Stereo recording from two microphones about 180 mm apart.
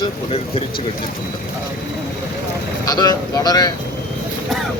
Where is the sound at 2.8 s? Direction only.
20° left (ahead or behind).